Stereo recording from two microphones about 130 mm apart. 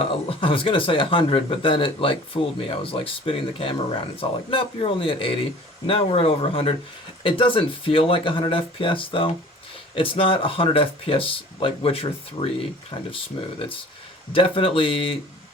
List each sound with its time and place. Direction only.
0.0 s speech: 45° left (ahead or behind)